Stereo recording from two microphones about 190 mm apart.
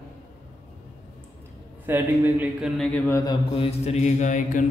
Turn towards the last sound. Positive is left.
turn(degrees=40)  # may be behind; listen again after turning